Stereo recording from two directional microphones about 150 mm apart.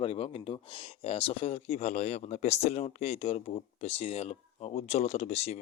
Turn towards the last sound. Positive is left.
turn(degrees=45)  # may be behind; listen again after turning